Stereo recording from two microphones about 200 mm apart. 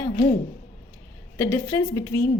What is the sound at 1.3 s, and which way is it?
Speech, 10° left (ahead or behind).